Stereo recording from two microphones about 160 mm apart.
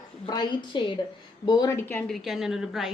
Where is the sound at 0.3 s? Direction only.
30° left (ahead or behind); by 2.1 s 10° left (ahead or behind).